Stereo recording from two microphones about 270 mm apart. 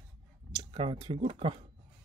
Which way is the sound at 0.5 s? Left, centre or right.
Centre.